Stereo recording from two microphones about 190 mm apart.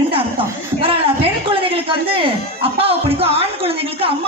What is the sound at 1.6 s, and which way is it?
A woman's voice, 30° right (ahead or behind).